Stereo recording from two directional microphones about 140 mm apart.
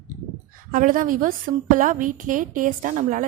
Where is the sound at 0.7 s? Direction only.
75° right (ahead or behind).